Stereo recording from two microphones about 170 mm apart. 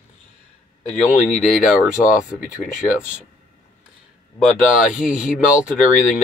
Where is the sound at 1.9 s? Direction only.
50° left (ahead or behind).